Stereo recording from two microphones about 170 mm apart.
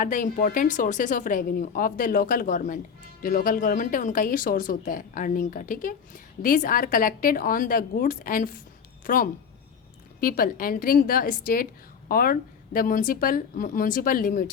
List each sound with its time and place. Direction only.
0.0 s a woman's voice: 50° left (ahead or behind)